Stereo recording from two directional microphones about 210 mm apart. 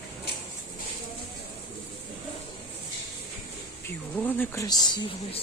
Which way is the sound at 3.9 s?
10° left (ahead or behind).